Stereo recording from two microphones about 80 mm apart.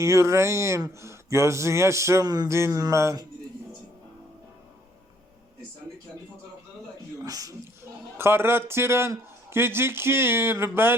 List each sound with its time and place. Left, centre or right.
0.0 s a man's voice: right
2.2 s music: right
2.5 s a man's voice: right
7.2 s speech: right
8.2 s a man's voice: right